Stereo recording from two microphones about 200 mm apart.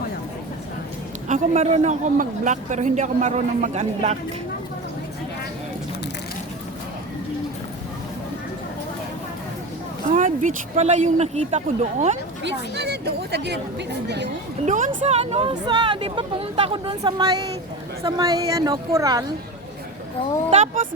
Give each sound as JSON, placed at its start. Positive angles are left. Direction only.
{"t": 1.3, "sound": "a man's voice", "side_deg": -35}
{"t": 10.1, "sound": "a man's voice", "side_deg": -40}
{"t": 12.4, "sound": "a woman's voice", "side_deg": -60}
{"t": 14.6, "sound": "a woman's voice", "side_deg": -35}